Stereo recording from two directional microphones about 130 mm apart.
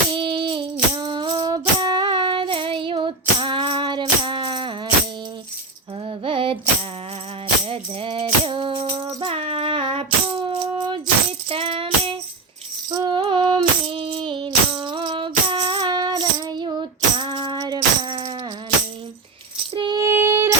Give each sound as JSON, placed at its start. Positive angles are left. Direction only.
{"t": 0.1, "sound": "music", "side_deg": -40}
{"t": 4.2, "sound": "a sound", "side_deg": -40}
{"t": 6.1, "sound": "a sound", "side_deg": -45}
{"t": 7.7, "sound": "music", "side_deg": -45}
{"t": 12.9, "sound": "music", "side_deg": -35}
{"t": 19.7, "sound": "female singing", "side_deg": -40}
{"t": 20.0, "sound": "female singing", "side_deg": -20}